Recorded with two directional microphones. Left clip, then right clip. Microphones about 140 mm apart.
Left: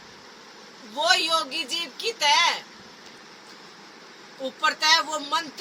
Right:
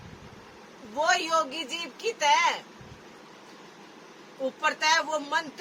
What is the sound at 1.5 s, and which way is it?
Speech, centre (ahead or behind).